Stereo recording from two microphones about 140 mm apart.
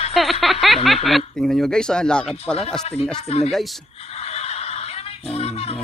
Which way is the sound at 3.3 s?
45° left (ahead or behind).